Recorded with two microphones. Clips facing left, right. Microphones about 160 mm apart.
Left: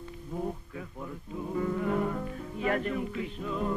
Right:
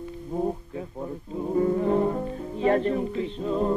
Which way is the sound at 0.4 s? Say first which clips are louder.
Right 7 dB; 30° right (ahead or behind).